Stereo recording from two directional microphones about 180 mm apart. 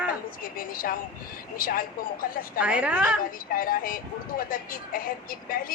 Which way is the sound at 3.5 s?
50° left (ahead or behind).